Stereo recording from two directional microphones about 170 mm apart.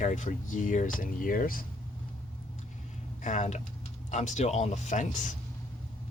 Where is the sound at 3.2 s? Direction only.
45° left (ahead or behind).